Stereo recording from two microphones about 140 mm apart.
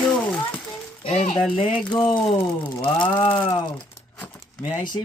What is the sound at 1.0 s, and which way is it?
Speech, 45° left (ahead or behind).